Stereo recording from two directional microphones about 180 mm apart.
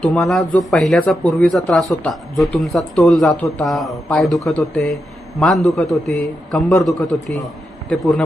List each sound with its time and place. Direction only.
0.0 s speech: centre (ahead or behind)